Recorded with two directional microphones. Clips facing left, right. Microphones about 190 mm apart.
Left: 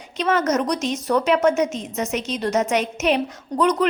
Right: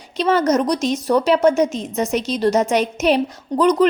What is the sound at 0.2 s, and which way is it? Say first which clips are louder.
Speech: right 4 dB; 35° right (ahead or behind).